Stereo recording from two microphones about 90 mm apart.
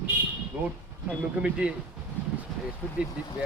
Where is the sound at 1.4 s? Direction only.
10° right (ahead or behind).